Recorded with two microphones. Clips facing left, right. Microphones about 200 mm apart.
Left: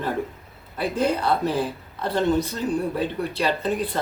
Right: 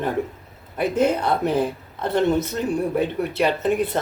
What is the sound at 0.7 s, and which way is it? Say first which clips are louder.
A woman's voice: right 3 dB; 20° right (ahead or behind).